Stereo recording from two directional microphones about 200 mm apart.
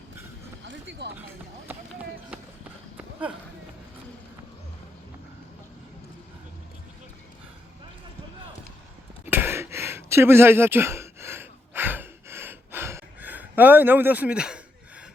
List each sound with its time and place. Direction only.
0.6 s music: 65° right (ahead or behind)
2.3 s run: 5° right (ahead or behind)
9.2 s a sound: 10° right (ahead or behind)